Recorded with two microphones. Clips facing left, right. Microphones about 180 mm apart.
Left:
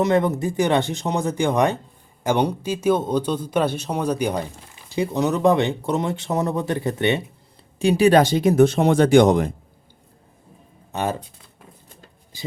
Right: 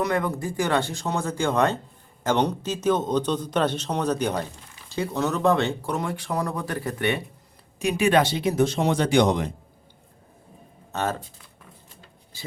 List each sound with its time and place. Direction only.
0.0 s a man's voice: 25° left (ahead or behind); by 9.5 s 50° left (ahead or behind)
10.9 s a man's voice: 15° left (ahead or behind)
12.3 s speech: 15° left (ahead or behind)